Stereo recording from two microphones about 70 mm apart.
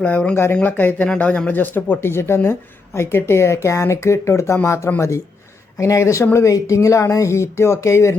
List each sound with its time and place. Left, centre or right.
0.0 s speech: centre; by 8.1 s left